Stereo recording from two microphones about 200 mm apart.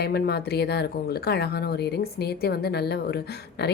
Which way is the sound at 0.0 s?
55° left (ahead or behind).